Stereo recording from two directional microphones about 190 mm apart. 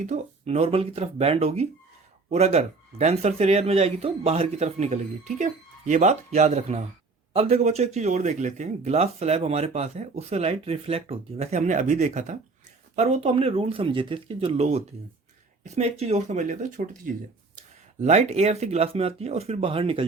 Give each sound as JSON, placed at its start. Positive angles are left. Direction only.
{"t": 0.0, "sound": "speech", "side_deg": -40}
{"t": 18.0, "sound": "speech", "side_deg": -35}